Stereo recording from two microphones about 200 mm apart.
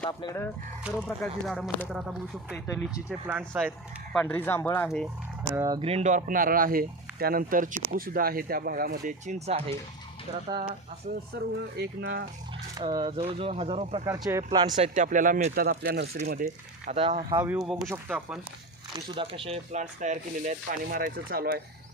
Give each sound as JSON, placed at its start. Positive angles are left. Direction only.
{"t": 0.1, "sound": "speech", "side_deg": 20}
{"t": 0.9, "sound": "speech", "side_deg": 5}
{"t": 4.1, "sound": "speech", "side_deg": 10}
{"t": 5.5, "sound": "speech", "side_deg": -20}
{"t": 11.3, "sound": "speech", "side_deg": -60}
{"t": 12.7, "sound": "speech", "side_deg": -20}
{"t": 14.0, "sound": "speech", "side_deg": -15}
{"t": 14.8, "sound": "speech", "side_deg": -40}
{"t": 15.5, "sound": "speech", "side_deg": -50}
{"t": 17.3, "sound": "speech", "side_deg": -10}
{"t": 18.9, "sound": "speech", "side_deg": -25}